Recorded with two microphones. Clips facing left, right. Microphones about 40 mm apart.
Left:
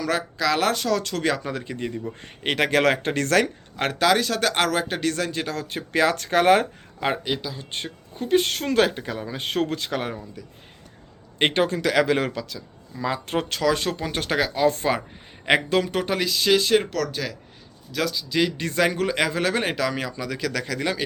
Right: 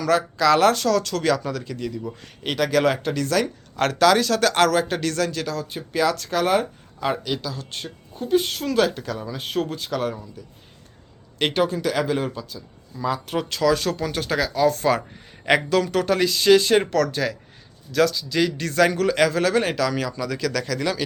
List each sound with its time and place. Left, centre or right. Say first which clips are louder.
0.0 s a man's voice: right 5 dB; centre; by 3.5 s left
3.8 s a man's voice: right 3 dB; centre
5.5 s speech: even; left
7.3 s speech: even; left
7.7 s speech: left 2 dB; left
8.9 s speech: right 1 dB; left
9.4 s speech: left 3 dB; left
11.3 s speech: left 1 dB; left
11.6 s speech: left 1 dB; left
13.3 s speech: right 2 dB; left
16.1 s a man's voice: right 5 dB; centre